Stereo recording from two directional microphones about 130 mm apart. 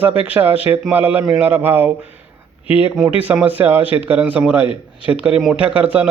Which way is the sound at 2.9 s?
5° right (ahead or behind).